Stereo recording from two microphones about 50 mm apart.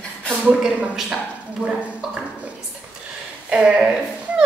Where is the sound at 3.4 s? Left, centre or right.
Right.